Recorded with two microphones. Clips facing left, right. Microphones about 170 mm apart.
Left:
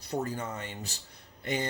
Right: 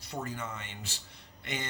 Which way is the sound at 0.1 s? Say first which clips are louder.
Left 5 dB; 40° left (ahead or behind).